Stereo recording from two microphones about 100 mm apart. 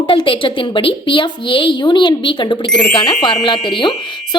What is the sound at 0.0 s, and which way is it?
A woman's voice, 55° left (ahead or behind).